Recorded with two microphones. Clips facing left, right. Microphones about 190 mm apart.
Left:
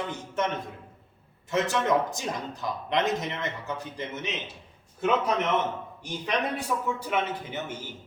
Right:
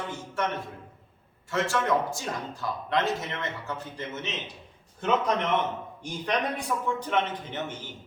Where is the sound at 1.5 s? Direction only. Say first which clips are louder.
Left 1 dB; 20° left (ahead or behind).